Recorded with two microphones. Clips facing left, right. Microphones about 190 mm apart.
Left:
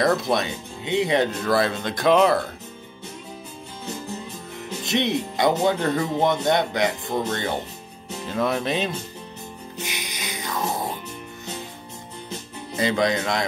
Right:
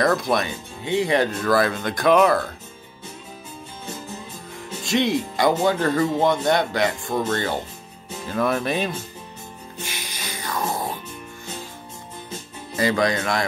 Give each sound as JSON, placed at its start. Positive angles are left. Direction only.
{"t": 0.0, "sound": "speech", "side_deg": 25}
{"t": 4.8, "sound": "speech", "side_deg": 20}
{"t": 9.8, "sound": "music", "side_deg": 20}
{"t": 12.7, "sound": "speech", "side_deg": 20}